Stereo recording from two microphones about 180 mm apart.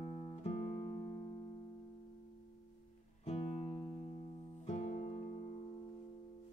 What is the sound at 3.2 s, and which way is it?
Music, 35° left (ahead or behind).